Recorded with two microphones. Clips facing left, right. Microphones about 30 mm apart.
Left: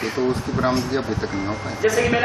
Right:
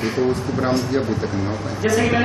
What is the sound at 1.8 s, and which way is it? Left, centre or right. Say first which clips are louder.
Speech: right 1 dB; centre.